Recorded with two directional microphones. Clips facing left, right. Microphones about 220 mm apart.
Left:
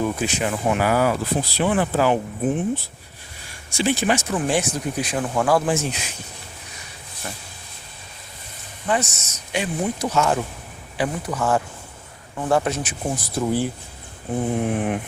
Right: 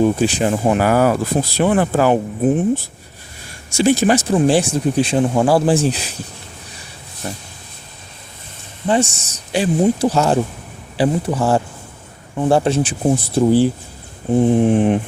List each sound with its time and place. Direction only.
0.0 s speech: 30° right (ahead or behind); by 2.1 s 50° right (ahead or behind)
3.8 s speech: 40° right (ahead or behind)
7.2 s speech: 30° right (ahead or behind)
8.9 s speech: 30° right (ahead or behind)